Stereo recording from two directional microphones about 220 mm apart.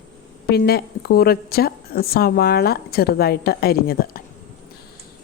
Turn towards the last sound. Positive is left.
turn(degrees=45)  # may be behind; listen again after turning